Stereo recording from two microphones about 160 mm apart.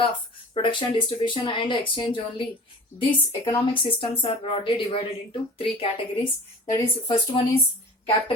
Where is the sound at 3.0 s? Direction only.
30° left (ahead or behind).